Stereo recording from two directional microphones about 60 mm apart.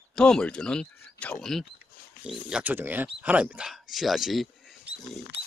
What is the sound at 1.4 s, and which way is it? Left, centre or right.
Speech, centre.